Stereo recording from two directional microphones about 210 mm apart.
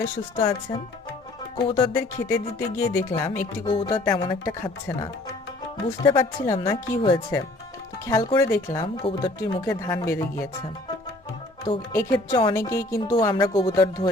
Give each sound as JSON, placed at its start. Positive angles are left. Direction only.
{"t": 0.3, "sound": "speech", "side_deg": 20}
{"t": 6.0, "sound": "speech", "side_deg": 20}
{"t": 11.6, "sound": "speech", "side_deg": 15}